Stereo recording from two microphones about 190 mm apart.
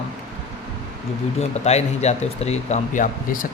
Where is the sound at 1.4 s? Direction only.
35° left (ahead or behind).